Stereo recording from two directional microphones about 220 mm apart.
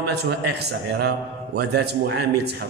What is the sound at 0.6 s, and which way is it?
A man's voice, 50° right (ahead or behind).